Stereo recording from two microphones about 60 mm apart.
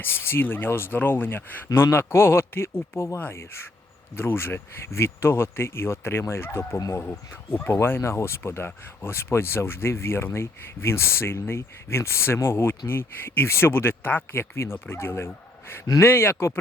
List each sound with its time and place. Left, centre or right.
0.0 s speech: left
4.1 s speech: left
6.7 s speech: left
7.0 s speech: left